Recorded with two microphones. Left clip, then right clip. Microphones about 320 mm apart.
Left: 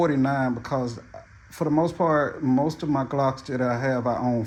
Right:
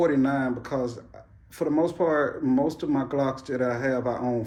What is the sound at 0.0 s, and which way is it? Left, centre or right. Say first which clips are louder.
Speech: left 1 dB; left.